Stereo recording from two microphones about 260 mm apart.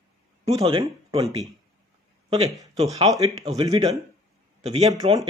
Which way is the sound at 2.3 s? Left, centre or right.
Centre.